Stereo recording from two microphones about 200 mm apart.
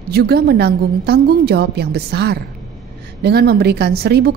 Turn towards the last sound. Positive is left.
turn(degrees=-50)  # may be behind; listen again after turning